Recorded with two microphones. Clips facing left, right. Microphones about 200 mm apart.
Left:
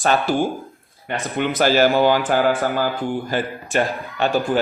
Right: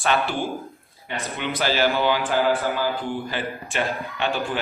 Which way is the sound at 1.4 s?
45° left (ahead or behind).